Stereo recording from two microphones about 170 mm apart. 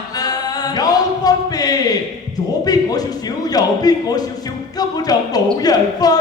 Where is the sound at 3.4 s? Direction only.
20° left (ahead or behind).